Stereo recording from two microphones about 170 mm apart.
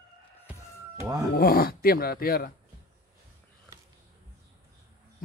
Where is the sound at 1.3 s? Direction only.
60° left (ahead or behind).